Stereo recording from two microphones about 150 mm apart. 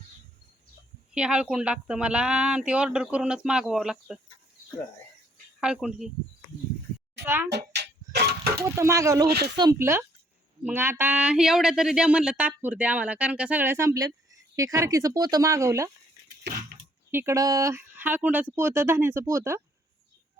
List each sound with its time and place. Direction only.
1.1 s speech: 5° right (ahead or behind)
5.5 s speech: 5° right (ahead or behind)
7.7 s tick-tock: 90° right
8.5 s speech: 20° right (ahead or behind)
17.1 s speech: 15° right (ahead or behind)